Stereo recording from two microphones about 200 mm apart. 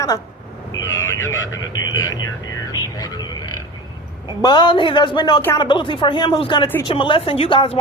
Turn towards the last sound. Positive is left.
turn(degrees=25)  # may be behind; listen again after turning